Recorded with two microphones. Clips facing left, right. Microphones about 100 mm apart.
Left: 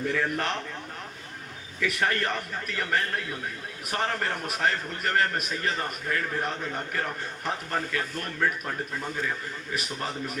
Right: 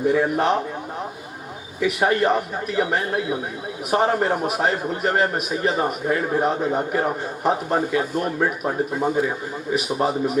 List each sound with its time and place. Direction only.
0.0 s a man's voice: 15° right (ahead or behind)
1.8 s a man's voice: 15° right (ahead or behind)